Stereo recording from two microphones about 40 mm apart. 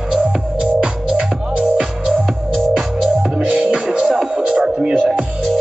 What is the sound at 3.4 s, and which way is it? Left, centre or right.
Music, right.